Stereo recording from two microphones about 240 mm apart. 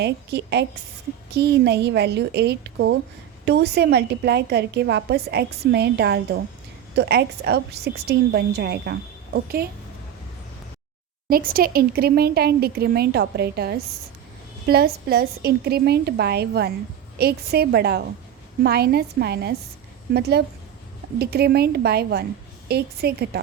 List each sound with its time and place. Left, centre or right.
0.0 s a woman's voice: right
11.3 s a woman's voice: right